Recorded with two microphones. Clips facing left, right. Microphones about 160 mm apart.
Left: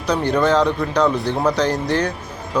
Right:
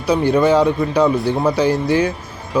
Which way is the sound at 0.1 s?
10° right (ahead or behind).